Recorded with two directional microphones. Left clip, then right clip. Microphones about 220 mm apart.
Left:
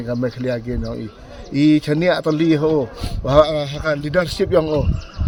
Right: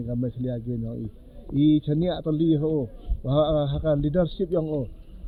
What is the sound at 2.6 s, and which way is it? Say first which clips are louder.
Speech: left 9 dB; 50° left (ahead or behind).